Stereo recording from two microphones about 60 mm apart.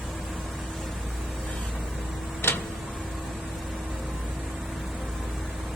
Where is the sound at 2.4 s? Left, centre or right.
Left.